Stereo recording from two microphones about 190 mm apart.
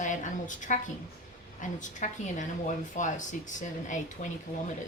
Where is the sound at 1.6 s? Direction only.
40° left (ahead or behind).